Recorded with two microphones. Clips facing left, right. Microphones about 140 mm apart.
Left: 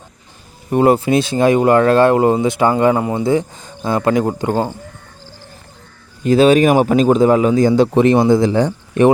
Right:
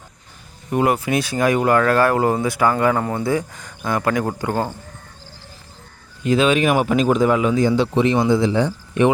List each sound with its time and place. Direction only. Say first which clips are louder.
0.7 s speech: left 6 dB; 30° left (ahead or behind)
6.2 s speech: left 6 dB; 40° left (ahead or behind)